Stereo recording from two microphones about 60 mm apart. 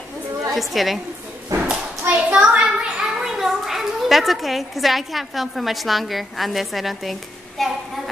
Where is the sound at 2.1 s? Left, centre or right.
Centre.